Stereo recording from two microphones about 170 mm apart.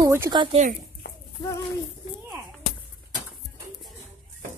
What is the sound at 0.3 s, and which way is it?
Speech, 30° right (ahead or behind).